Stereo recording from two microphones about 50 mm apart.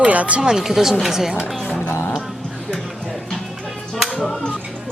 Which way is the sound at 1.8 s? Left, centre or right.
Left.